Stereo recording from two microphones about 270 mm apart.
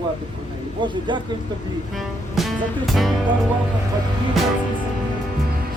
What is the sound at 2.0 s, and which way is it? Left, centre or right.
Music, centre.